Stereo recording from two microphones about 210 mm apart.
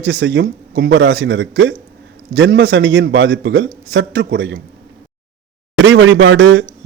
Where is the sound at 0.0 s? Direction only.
60° right (ahead or behind).